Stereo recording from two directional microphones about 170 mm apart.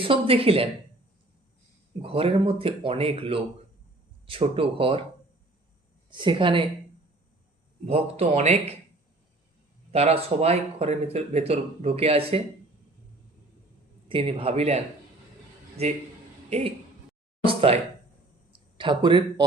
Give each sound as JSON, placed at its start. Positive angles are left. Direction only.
{"t": 0.0, "sound": "speech", "side_deg": -30}
{"t": 2.0, "sound": "speech", "side_deg": -35}
{"t": 6.1, "sound": "speech", "side_deg": -30}
{"t": 7.9, "sound": "speech", "side_deg": -35}
{"t": 9.9, "sound": "speech", "side_deg": -35}
{"t": 14.1, "sound": "speech", "side_deg": -35}
{"t": 16.5, "sound": "speech", "side_deg": -40}
{"t": 17.4, "sound": "a sound", "side_deg": -35}
{"t": 18.8, "sound": "speech", "side_deg": -30}